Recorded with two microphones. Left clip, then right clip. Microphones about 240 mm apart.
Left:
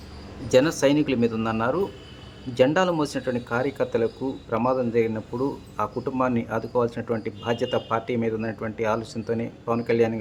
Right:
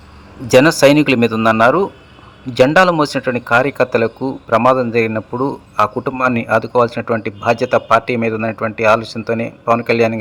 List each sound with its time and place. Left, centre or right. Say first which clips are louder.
0.5 s a man's voice: right 10 dB; right